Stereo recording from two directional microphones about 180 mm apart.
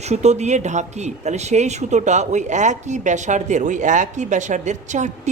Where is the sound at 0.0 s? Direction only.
40° right (ahead or behind).